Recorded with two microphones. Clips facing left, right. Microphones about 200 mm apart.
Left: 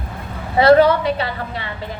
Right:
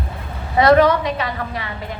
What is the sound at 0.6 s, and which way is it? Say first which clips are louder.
A woman's voice: left 1 dB; 30° left (ahead or behind).